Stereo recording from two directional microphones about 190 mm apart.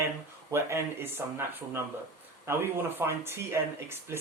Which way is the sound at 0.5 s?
15° right (ahead or behind).